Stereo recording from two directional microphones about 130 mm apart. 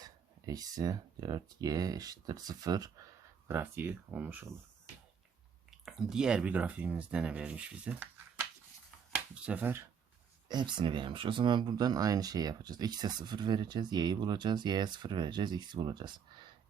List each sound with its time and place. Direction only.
0.0 s speech: 30° right (ahead or behind)
3.5 s speech: 15° right (ahead or behind)
5.7 s speech: centre (ahead or behind)
10.5 s speech: 35° right (ahead or behind)